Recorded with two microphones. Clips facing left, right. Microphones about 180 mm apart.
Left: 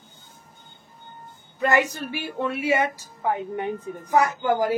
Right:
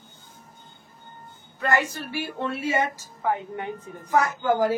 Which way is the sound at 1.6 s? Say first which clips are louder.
Left 3 dB; 20° left (ahead or behind).